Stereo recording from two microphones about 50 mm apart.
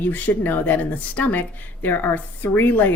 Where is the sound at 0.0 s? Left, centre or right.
Left.